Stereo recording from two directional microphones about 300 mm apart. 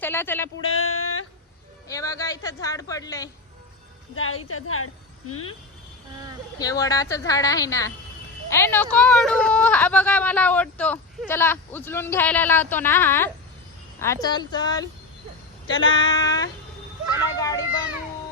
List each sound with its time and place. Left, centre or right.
0.0 s speech: centre
0.7 s a sound: left
1.9 s speech: centre
4.1 s a woman's voice: left
6.6 s speech: centre
15.7 s female singing: left
16.0 s speech: centre
17.3 s children playing: centre